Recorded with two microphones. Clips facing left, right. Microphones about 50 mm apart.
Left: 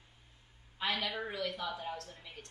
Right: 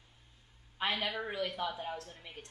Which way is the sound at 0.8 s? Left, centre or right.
Right.